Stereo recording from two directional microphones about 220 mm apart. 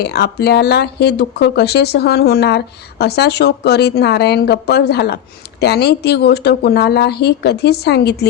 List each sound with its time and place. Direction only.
0.0 s speech: 45° left (ahead or behind)